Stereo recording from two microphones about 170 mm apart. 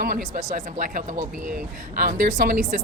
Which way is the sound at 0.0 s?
50° right (ahead or behind).